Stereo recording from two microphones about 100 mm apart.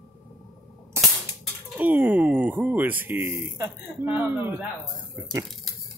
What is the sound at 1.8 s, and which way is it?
Speech, 15° right (ahead or behind).